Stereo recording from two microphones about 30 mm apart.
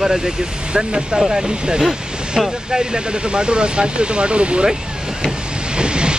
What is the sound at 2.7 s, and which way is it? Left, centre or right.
Speech, right.